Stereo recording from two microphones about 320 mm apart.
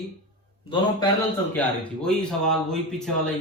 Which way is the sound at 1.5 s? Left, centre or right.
Centre.